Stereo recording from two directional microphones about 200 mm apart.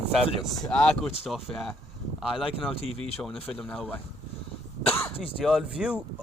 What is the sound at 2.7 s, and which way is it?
Speech, 30° left (ahead or behind).